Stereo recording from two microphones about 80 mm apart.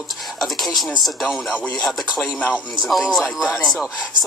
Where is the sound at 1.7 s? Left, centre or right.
Centre.